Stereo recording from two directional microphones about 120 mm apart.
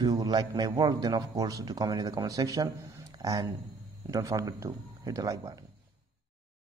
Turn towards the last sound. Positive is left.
turn(degrees=-30)  # may be behind; listen again after turning